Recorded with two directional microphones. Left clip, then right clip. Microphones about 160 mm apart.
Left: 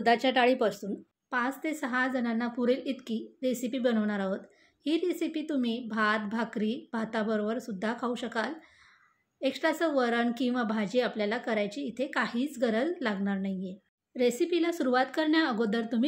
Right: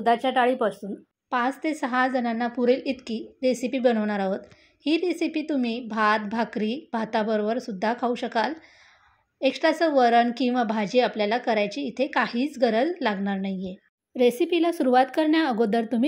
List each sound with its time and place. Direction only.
0.0 s a woman's voice: 10° right (ahead or behind)
1.3 s a woman's voice: 25° right (ahead or behind)
14.1 s speech: 35° right (ahead or behind)